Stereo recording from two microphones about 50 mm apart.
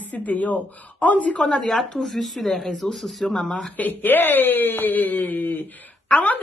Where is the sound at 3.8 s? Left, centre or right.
Left.